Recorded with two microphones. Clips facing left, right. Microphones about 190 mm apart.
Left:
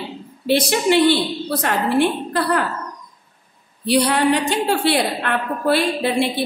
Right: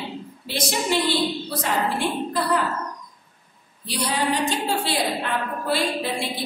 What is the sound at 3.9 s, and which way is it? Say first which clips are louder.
A woman's voice: left 8 dB; 65° left (ahead or behind).